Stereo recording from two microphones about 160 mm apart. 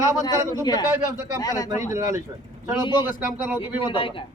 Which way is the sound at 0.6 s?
25° left (ahead or behind).